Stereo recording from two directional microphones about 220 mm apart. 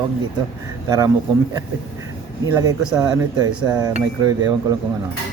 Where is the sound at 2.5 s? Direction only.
15° right (ahead or behind).